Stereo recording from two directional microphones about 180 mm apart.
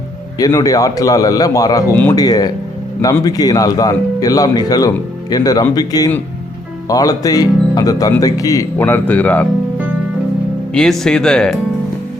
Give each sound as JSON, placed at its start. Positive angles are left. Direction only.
{"t": 0.3, "sound": "speech", "side_deg": 20}
{"t": 10.8, "sound": "speech", "side_deg": 0}